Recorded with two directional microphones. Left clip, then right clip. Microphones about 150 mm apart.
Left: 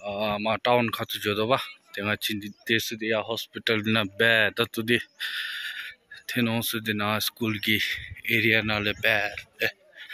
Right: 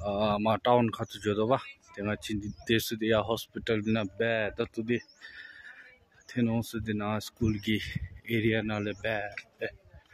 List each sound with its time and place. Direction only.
0.0 s speech: 35° right (ahead or behind); by 2.7 s 15° right (ahead or behind)
2.7 s speech: 35° right (ahead or behind)
3.5 s speech: 10° right (ahead or behind)